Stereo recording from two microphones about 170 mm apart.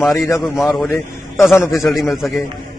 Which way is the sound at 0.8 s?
15° left (ahead or behind).